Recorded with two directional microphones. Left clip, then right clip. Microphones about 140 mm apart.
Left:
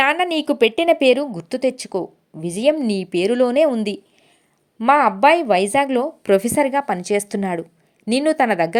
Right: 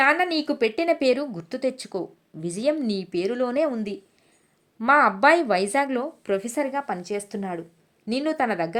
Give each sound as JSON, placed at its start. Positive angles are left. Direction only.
{"t": 0.0, "sound": "speech", "side_deg": 35}
{"t": 4.8, "sound": "a woman's voice", "side_deg": 20}